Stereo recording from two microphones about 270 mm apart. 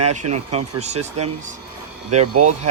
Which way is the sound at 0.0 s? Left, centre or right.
Right.